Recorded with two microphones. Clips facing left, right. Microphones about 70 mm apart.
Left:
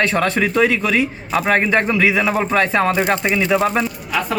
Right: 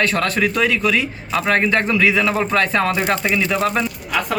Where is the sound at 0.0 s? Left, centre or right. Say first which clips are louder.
Left 1 dB; left.